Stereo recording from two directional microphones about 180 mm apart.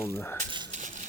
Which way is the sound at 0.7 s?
45° right (ahead or behind).